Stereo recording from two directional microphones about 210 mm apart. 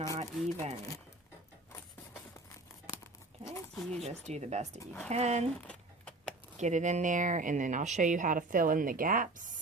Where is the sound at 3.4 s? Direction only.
10° left (ahead or behind).